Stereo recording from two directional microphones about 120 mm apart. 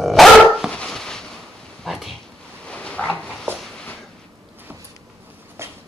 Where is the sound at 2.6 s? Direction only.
10° left (ahead or behind).